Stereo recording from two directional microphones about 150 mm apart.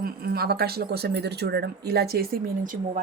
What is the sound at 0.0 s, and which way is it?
Speech, 90° right.